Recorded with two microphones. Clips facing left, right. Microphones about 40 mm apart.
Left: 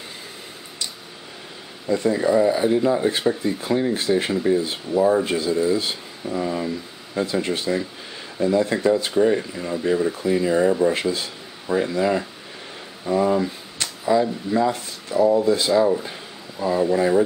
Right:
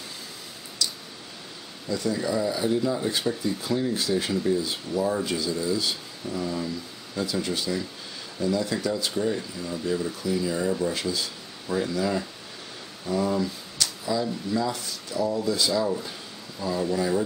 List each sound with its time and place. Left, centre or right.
1.9 s speech: left
11.6 s speech: left